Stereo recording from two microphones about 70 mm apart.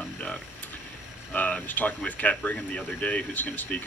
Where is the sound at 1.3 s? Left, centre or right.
Left.